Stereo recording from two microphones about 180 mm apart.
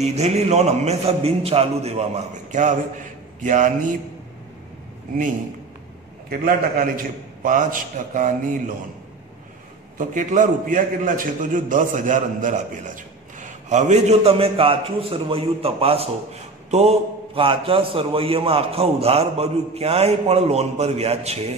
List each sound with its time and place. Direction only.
0.0 s a man's voice: 35° right (ahead or behind)
6.2 s a man's voice: 50° right (ahead or behind)
9.9 s a man's voice: 45° right (ahead or behind)